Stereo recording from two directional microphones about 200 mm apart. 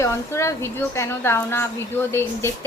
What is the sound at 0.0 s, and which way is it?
A woman's voice, 15° left (ahead or behind).